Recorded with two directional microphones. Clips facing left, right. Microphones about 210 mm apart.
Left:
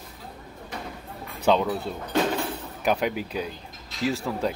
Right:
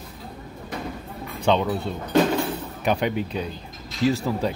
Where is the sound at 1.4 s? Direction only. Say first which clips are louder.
Right 1 dB; 5° left (ahead or behind).